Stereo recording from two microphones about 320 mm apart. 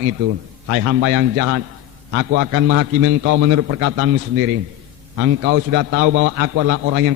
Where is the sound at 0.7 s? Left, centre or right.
Right.